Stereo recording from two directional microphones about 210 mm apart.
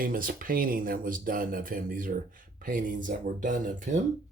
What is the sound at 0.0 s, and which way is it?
Speech, 40° right (ahead or behind).